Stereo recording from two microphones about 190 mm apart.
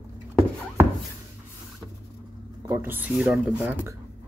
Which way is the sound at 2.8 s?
10° right (ahead or behind).